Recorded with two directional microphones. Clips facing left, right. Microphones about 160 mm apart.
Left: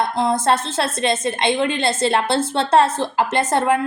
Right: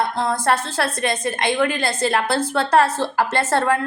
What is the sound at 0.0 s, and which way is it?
A woman's voice, 20° left (ahead or behind).